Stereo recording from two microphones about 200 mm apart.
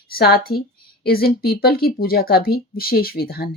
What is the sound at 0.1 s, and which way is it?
Speech, 50° left (ahead or behind).